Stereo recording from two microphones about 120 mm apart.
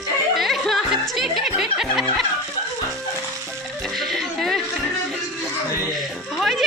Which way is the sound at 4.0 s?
Centre (ahead or behind).